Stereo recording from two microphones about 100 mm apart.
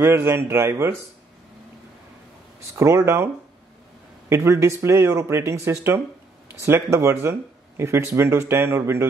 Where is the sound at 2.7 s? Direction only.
30° right (ahead or behind).